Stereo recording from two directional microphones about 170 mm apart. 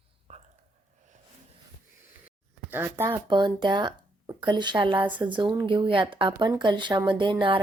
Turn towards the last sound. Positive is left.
turn(degrees=-30)  # may be behind; listen again after turning